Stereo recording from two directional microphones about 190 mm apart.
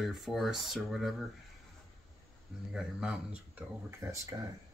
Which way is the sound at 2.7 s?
5° right (ahead or behind).